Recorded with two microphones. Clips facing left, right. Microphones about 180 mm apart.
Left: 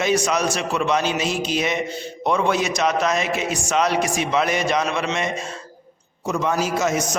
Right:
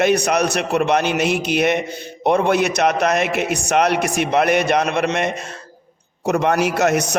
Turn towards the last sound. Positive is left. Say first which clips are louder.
# right 4 dB
turn(degrees=-65)  # may be behind; listen again after turning